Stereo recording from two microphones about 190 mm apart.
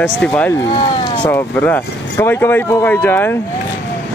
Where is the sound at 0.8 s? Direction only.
25° left (ahead or behind).